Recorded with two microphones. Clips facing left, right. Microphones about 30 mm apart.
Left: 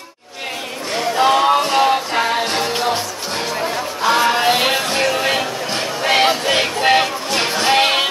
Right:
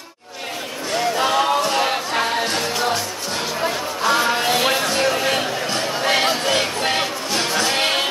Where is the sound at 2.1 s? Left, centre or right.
Left.